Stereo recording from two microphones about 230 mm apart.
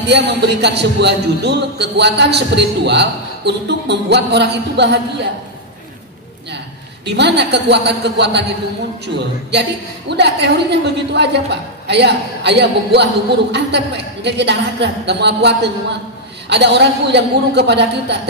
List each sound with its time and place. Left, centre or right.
0.1 s a man's voice: right
7.1 s a man's voice: right